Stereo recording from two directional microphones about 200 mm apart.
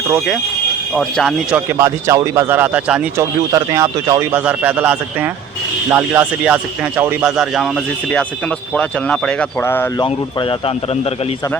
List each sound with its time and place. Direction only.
0.9 s speech: centre (ahead or behind)
1.8 s a man's voice: 15° right (ahead or behind); by 9.9 s 10° left (ahead or behind)
10.0 s speech: 25° left (ahead or behind)